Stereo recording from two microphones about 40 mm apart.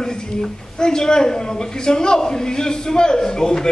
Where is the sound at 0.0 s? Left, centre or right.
Centre.